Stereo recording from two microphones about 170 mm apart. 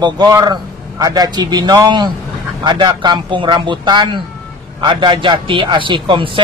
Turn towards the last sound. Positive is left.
turn(degrees=-30)  # may be behind; listen again after turning